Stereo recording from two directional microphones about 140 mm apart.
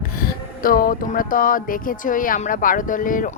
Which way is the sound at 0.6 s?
90° left.